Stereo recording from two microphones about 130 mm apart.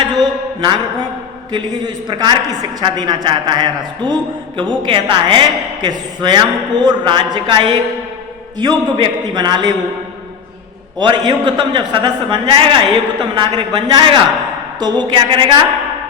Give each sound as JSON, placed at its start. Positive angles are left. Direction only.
{"t": 0.0, "sound": "a sound", "side_deg": -35}
{"t": 1.5, "sound": "a man's voice", "side_deg": -35}
{"t": 11.0, "sound": "a man's voice", "side_deg": -35}